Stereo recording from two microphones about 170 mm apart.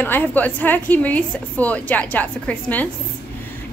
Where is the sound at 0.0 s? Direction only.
10° left (ahead or behind).